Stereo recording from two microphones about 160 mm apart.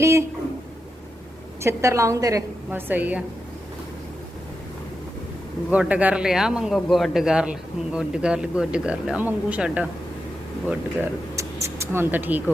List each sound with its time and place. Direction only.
0.0 s a woman's voice: 15° right (ahead or behind)
1.6 s a woman's voice: 20° right (ahead or behind)
5.7 s speech: 10° right (ahead or behind)